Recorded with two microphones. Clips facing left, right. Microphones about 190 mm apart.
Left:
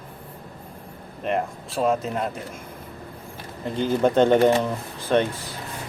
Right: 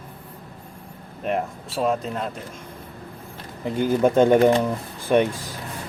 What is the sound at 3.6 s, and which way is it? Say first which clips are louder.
Speech: right 2 dB; 10° right (ahead or behind).